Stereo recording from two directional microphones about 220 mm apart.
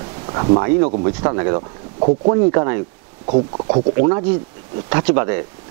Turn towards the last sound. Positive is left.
turn(degrees=-15)  # may be behind; listen again after turning